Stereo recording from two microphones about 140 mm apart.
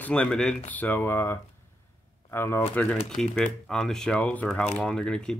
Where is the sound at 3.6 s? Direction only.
5° left (ahead or behind).